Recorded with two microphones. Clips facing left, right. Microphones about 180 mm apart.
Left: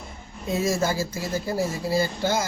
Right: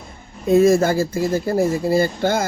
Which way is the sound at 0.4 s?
55° right (ahead or behind).